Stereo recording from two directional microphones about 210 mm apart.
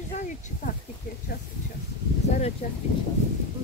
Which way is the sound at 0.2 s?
40° left (ahead or behind).